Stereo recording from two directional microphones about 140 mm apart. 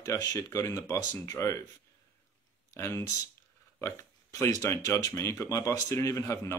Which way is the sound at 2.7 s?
20° left (ahead or behind).